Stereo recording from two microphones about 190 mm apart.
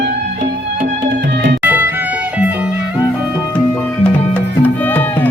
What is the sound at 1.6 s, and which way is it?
Music, 10° right (ahead or behind).